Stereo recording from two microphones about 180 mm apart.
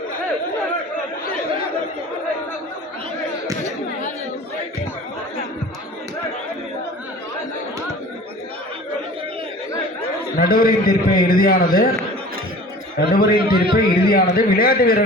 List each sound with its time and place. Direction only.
10.3 s a man's voice: 55° left (ahead or behind)
13.0 s a man's voice: 55° left (ahead or behind)